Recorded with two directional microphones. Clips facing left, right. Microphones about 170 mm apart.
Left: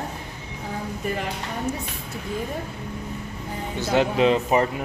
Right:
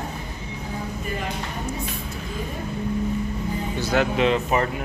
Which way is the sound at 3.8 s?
30° left (ahead or behind).